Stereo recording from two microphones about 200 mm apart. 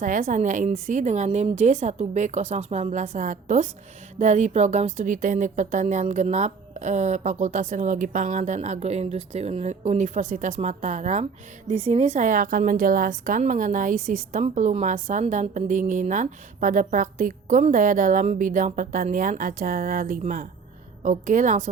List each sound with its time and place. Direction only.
0.0 s a woman's voice: 40° right (ahead or behind)